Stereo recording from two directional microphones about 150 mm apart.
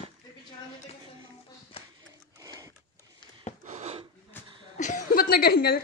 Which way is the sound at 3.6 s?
50° right (ahead or behind).